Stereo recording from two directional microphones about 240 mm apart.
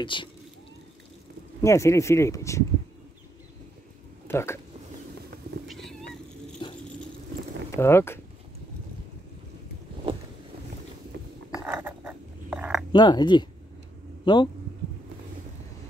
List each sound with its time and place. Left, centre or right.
0.0 s speech: left
1.6 s speech: centre
4.3 s speech: centre
5.7 s cat: centre
6.6 s vehicle: centre
7.7 s speech: centre
11.5 s dog: centre
12.9 s speech: centre